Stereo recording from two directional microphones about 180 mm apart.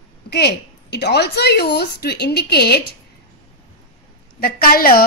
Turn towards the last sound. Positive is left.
turn(degrees=55)  # may be behind; listen again after turning